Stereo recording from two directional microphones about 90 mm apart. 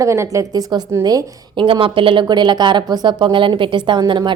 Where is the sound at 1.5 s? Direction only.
75° right (ahead or behind).